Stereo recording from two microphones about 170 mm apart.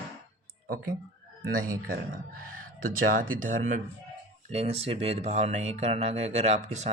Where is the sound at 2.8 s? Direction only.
55° right (ahead or behind).